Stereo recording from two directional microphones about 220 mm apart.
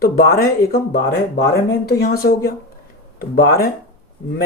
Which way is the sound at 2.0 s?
45° left (ahead or behind).